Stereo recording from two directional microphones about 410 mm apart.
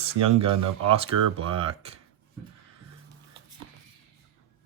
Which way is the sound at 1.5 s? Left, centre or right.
Centre.